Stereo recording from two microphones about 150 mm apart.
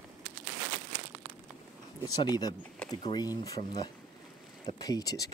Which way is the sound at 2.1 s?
25° left (ahead or behind).